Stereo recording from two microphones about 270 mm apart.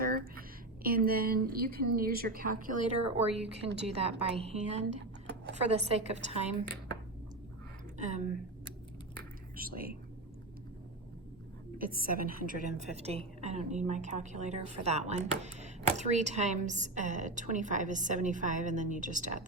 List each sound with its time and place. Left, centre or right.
0.0 s a woman's voice: right
7.9 s a woman's voice: right
9.6 s a woman's voice: right
11.8 s a woman's voice: right